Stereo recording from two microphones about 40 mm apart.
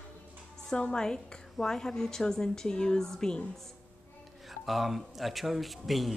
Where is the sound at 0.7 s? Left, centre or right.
Centre.